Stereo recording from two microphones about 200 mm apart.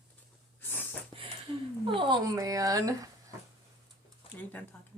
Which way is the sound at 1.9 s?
25° right (ahead or behind).